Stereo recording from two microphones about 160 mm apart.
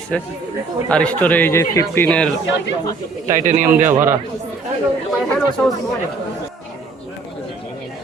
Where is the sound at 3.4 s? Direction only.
55° right (ahead or behind).